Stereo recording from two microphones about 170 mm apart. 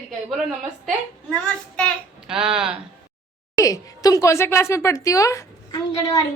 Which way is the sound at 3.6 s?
20° left (ahead or behind).